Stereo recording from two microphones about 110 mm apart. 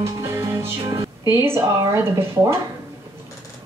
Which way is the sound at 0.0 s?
25° right (ahead or behind).